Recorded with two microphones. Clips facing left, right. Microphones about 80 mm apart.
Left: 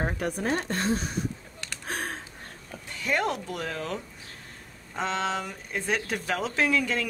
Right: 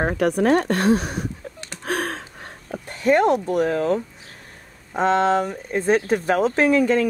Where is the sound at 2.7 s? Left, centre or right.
Right.